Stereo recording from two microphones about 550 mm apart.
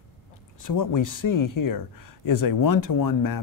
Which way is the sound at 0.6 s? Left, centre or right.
Left.